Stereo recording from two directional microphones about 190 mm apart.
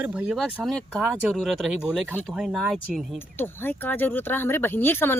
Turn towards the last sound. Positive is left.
turn(degrees=10)  # may be behind; listen again after turning